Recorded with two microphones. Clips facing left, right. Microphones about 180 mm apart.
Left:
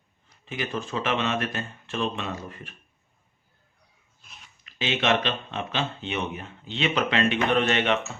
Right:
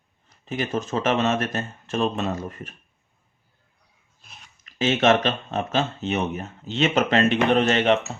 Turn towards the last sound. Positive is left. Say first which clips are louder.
# right 4 dB
turn(degrees=-40)  # may be behind; listen again after turning